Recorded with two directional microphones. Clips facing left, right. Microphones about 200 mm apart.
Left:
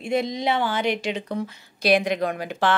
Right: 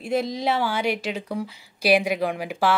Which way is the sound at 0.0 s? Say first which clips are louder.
Even; 5° right (ahead or behind).